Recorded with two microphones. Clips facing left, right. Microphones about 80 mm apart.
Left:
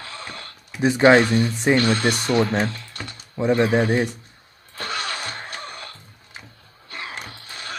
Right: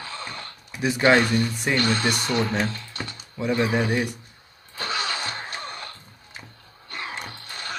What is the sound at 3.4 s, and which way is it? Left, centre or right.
Speech, left.